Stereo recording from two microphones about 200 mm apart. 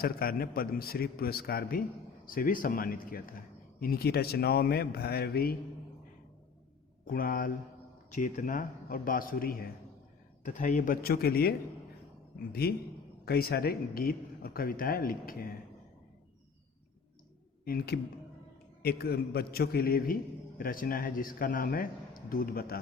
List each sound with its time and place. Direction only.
0.0 s a man's voice: 50° left (ahead or behind)
7.0 s a man's voice: 45° left (ahead or behind)
17.7 s a man's voice: 50° left (ahead or behind)